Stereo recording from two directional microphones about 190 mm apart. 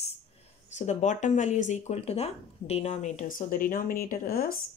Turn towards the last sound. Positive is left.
turn(degrees=50)  # may be behind; listen again after turning